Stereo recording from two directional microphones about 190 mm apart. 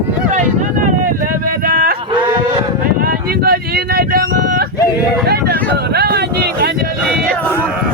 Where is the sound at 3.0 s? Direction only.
55° right (ahead or behind).